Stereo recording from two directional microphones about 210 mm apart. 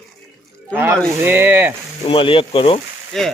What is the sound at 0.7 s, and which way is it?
Speech, 10° right (ahead or behind).